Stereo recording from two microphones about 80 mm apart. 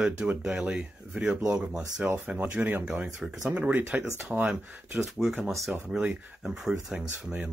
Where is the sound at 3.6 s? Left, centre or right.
Right.